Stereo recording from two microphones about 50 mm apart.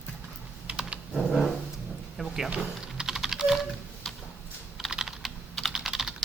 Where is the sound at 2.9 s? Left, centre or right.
Centre.